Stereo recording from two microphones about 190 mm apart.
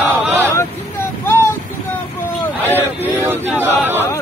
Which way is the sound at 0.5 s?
10° left (ahead or behind).